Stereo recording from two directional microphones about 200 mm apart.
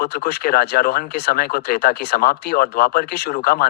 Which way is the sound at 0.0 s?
50° left (ahead or behind).